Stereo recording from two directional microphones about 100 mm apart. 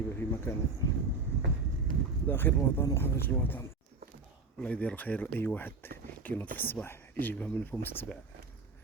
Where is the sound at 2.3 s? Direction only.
20° left (ahead or behind).